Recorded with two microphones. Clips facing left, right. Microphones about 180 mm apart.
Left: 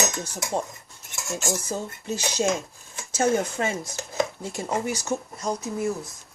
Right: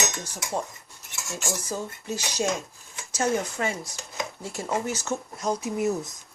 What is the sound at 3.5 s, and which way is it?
Speech, 25° left (ahead or behind).